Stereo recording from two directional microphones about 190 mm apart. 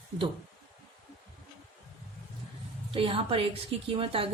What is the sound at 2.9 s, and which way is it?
A woman's voice, 30° right (ahead or behind).